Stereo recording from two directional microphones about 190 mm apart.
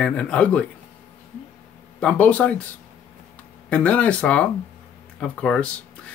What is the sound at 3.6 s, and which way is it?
Speech, 5° left (ahead or behind).